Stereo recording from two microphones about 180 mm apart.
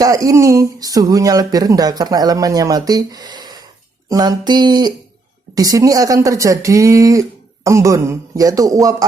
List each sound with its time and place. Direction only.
0.0 s speech: 20° right (ahead or behind)